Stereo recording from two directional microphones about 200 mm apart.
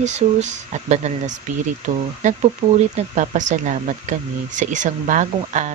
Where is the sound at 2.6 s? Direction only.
20° right (ahead or behind).